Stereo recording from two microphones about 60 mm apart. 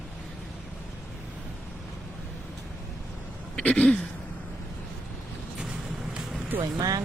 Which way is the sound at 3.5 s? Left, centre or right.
Centre.